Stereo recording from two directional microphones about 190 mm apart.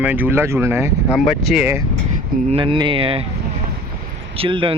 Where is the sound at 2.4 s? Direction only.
30° right (ahead or behind).